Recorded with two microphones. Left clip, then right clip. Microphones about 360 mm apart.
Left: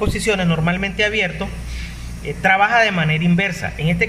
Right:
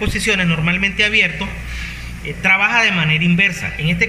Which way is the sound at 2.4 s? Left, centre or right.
Left.